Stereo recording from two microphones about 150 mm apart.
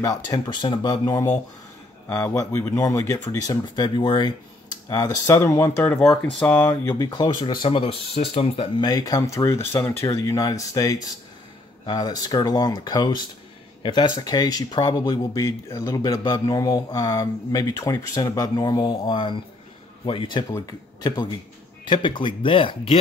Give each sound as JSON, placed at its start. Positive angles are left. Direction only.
{"t": 0.0, "sound": "speech", "side_deg": 25}
{"t": 5.9, "sound": "speech", "side_deg": 5}
{"t": 7.0, "sound": "speech", "side_deg": 30}
{"t": 8.8, "sound": "speech", "side_deg": 25}